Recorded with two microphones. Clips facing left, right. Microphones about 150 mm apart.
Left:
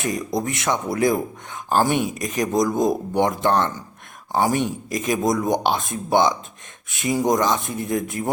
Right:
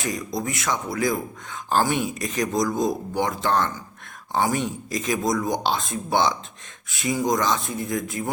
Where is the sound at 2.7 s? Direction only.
55° left (ahead or behind).